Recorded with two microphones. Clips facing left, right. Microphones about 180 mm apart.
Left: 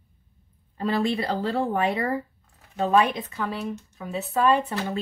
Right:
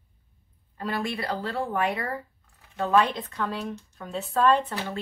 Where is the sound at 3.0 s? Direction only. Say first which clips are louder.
Left 2 dB; 10° left (ahead or behind).